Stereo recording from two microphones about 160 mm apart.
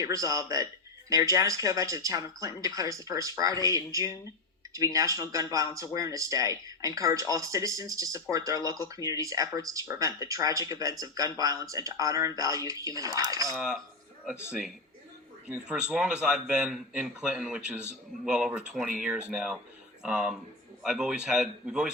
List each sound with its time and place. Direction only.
0.0 s speech: 20° right (ahead or behind)
13.6 s speech: 5° right (ahead or behind)
15.4 s a man's voice: 5° right (ahead or behind)